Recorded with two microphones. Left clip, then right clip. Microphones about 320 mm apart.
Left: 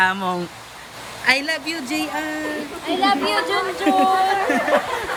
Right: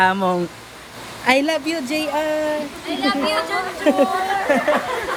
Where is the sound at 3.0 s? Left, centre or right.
Left.